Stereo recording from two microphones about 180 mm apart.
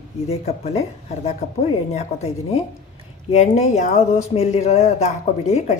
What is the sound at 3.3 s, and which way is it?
Speech, 40° left (ahead or behind).